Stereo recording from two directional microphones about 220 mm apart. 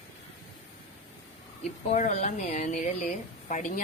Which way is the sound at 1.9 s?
35° left (ahead or behind).